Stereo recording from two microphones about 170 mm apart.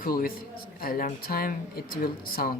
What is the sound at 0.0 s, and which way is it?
Speech, 60° left (ahead or behind).